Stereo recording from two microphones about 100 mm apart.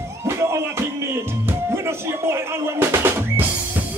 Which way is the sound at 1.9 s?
25° right (ahead or behind).